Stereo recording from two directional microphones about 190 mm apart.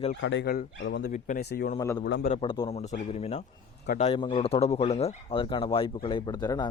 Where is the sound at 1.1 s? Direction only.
45° left (ahead or behind).